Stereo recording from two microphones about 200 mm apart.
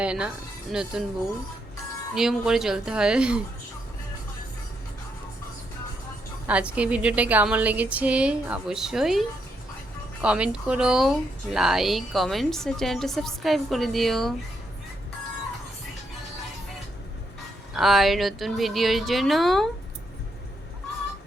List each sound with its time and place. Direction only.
0.0 s speech: 5° right (ahead or behind)
2.1 s speech: centre (ahead or behind)
6.5 s a woman's voice: 5° right (ahead or behind)
17.7 s speech: centre (ahead or behind)